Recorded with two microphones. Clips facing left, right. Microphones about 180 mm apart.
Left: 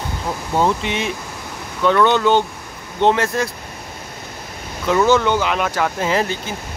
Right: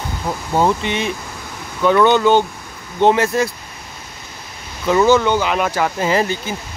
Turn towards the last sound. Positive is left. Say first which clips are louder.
# right 2 dB
turn(degrees=0)  # may be behind; listen again after turning